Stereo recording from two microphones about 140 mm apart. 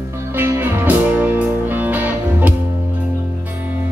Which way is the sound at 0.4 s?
15° right (ahead or behind).